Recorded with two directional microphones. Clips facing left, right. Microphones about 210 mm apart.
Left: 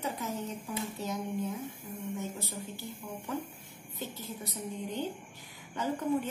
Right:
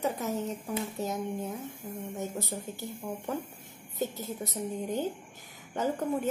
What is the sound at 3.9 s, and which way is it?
A woman's voice, 45° right (ahead or behind).